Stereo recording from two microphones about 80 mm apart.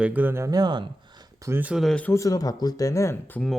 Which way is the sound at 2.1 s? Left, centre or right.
Left.